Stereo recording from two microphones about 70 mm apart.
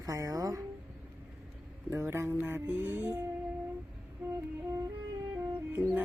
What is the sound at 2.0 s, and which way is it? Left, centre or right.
Music, right.